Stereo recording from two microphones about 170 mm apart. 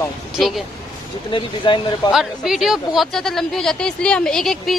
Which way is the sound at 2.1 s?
5° right (ahead or behind).